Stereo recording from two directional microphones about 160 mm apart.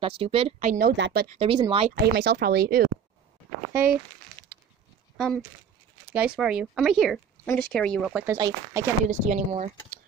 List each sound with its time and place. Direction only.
0.0 s a woman's voice: 35° right (ahead or behind)
0.7 s a woman's voice: 70° right (ahead or behind)
1.4 s a woman's voice: 35° right (ahead or behind)
2.0 s speech: 90° right
5.1 s speech: centre (ahead or behind)
8.1 s speech: 10° right (ahead or behind)
8.4 s speech: 20° right (ahead or behind)
9.2 s speech: 50° right (ahead or behind)